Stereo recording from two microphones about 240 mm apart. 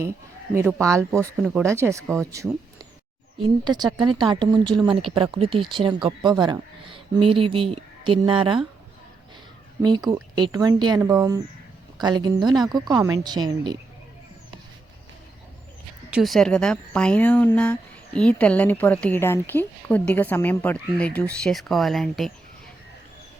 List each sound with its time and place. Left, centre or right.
0.5 s a woman's voice: centre
3.6 s speech: centre
10.1 s a woman's voice: centre
16.0 s speech: centre